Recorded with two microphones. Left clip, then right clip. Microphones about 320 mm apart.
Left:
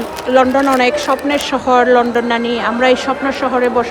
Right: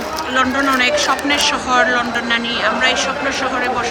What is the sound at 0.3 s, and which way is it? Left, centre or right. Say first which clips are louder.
Speech: left 4 dB; centre.